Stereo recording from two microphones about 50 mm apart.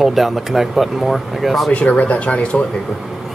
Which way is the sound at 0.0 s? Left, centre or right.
Centre.